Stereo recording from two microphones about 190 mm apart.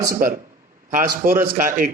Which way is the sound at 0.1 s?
45° right (ahead or behind).